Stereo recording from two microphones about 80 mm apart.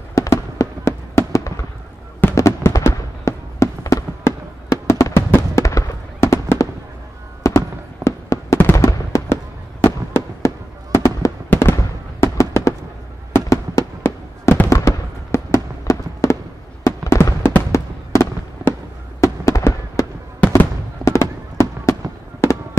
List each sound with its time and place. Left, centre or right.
0.1 s fireworks: left
16.8 s music: left
17.6 s fireworks: left
20.3 s fireworks: left
21.0 s fireworks: left